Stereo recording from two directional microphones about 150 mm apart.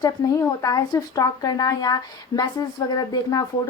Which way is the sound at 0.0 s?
20° left (ahead or behind).